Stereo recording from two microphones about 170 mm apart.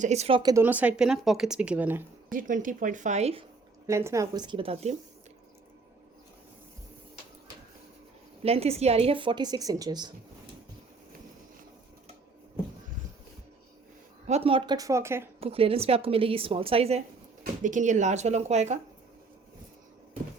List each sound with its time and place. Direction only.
0.0 s a woman's voice: 40° right (ahead or behind)
0.5 s speech: 10° right (ahead or behind)
2.3 s speech: 50° right (ahead or behind)
3.8 s a woman's voice: 15° right (ahead or behind); by 4.9 s 40° right (ahead or behind)
8.4 s a woman's voice: 35° right (ahead or behind)
14.3 s a woman's voice: 35° right (ahead or behind); by 15.3 s 15° right (ahead or behind)
15.4 s a woman's voice: 35° right (ahead or behind)
17.4 s speech: 45° right (ahead or behind)